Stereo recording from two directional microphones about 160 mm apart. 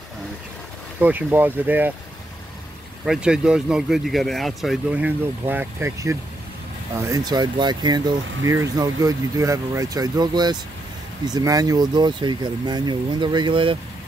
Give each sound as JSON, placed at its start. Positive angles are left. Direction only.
{"t": 0.9, "sound": "speech", "side_deg": -10}
{"t": 3.1, "sound": "speech", "side_deg": -5}